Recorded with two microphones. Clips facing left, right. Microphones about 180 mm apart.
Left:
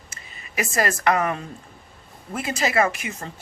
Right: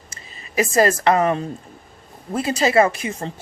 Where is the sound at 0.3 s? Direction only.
30° right (ahead or behind).